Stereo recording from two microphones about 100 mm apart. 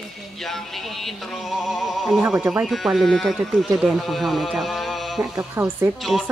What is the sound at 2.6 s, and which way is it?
Speech, centre (ahead or behind).